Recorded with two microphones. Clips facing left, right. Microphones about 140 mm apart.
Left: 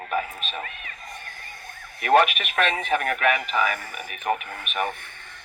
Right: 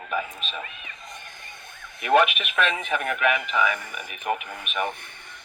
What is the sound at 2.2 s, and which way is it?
Speech, 45° left (ahead or behind).